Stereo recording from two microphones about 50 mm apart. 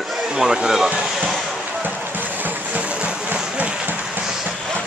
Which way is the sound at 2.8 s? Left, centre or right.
Right.